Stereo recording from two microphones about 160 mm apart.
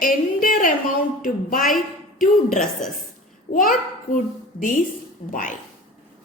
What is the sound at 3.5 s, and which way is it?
Speech, 60° left (ahead or behind).